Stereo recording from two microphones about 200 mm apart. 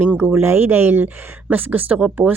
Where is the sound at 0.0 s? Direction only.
5° right (ahead or behind).